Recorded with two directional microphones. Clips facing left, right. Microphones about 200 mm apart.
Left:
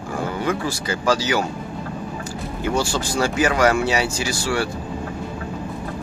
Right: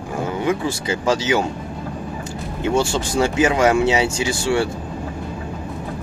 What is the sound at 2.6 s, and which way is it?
Speech, 20° right (ahead or behind).